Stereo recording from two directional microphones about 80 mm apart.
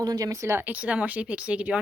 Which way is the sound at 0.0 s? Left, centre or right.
Right.